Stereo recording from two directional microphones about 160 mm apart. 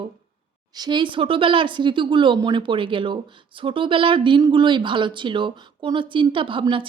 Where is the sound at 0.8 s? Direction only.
30° right (ahead or behind).